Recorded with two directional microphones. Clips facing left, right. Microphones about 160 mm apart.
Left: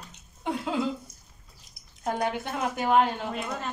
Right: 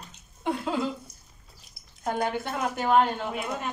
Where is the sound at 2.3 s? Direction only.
15° left (ahead or behind).